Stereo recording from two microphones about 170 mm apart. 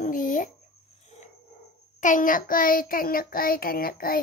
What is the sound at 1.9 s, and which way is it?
Child singing, 50° left (ahead or behind).